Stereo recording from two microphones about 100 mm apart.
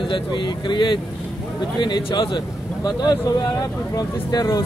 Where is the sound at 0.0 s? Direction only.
50° left (ahead or behind).